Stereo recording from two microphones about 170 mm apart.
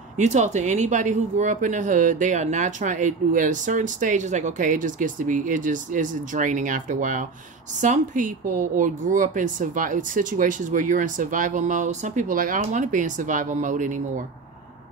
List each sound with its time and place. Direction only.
0.2 s speech: 45° right (ahead or behind)